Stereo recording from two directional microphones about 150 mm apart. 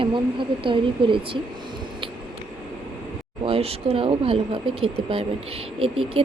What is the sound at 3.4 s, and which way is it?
A woman's voice, 40° right (ahead or behind).